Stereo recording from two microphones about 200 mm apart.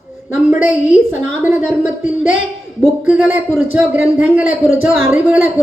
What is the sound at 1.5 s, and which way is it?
A woman's voice, 10° right (ahead or behind).